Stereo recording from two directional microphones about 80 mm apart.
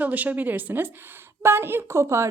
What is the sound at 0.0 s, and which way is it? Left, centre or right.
A woman's voice, centre.